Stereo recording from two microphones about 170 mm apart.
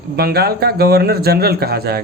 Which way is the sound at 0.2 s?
65° right (ahead or behind).